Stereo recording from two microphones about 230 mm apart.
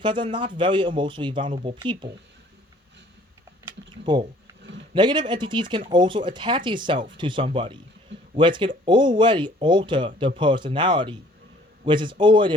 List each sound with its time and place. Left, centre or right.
0.0 s speech: right
3.7 s typing: centre
4.9 s speech: centre